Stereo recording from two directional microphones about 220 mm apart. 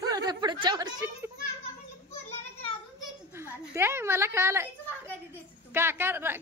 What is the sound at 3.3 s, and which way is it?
A woman's voice, 10° right (ahead or behind).